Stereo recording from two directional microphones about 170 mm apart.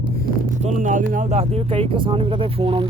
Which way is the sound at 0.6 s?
45° right (ahead or behind).